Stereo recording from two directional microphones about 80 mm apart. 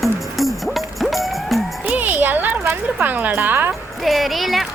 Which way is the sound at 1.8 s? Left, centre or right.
Right.